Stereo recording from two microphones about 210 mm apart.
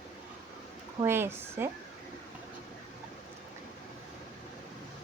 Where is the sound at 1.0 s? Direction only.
10° right (ahead or behind).